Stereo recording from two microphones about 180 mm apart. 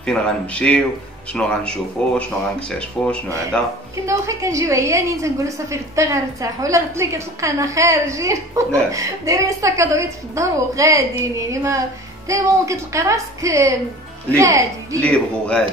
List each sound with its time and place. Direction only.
0.0 s speech: 5° left (ahead or behind)
3.5 s speech: 5° left (ahead or behind)
4.0 s a woman's voice: 15° right (ahead or behind)
15.0 s speech: 5° left (ahead or behind)